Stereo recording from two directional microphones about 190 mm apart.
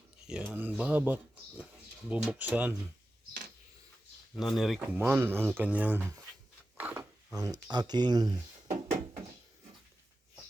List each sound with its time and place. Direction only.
0.3 s speech: 5° right (ahead or behind)
4.4 s speech: centre (ahead or behind); by 8.4 s 20° right (ahead or behind)